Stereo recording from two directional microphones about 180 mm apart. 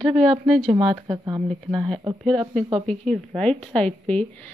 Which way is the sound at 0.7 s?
30° right (ahead or behind).